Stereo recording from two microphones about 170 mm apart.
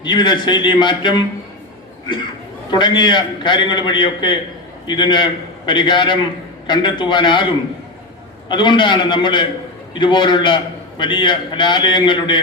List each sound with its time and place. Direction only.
0.0 s a man's voice: 25° left (ahead or behind)
2.6 s a man's voice: 25° left (ahead or behind)
8.4 s a man's voice: 30° left (ahead or behind)